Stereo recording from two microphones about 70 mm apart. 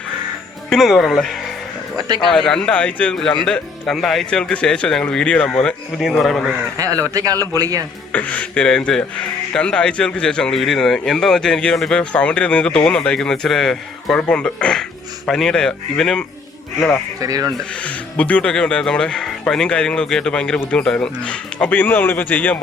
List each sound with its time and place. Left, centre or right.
0.7 s speech: centre
6.0 s speech: centre
6.7 s a man's voice: right
8.1 s speech: centre
10.5 s speech: centre
17.2 s a man's voice: right
17.7 s speech: centre